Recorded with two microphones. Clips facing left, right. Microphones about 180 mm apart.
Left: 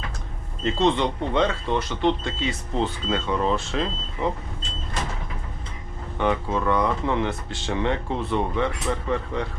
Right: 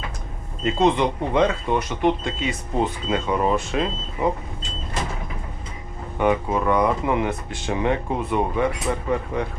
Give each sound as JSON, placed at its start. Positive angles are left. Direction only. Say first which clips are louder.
{"t": 0.6, "sound": "speech", "louder": "right 2 dB", "side_deg": -15}
{"t": 6.1, "sound": "speech", "louder": "right 3 dB", "side_deg": -15}